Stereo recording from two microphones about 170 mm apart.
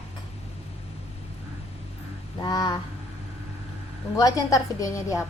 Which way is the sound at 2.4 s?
25° left (ahead or behind).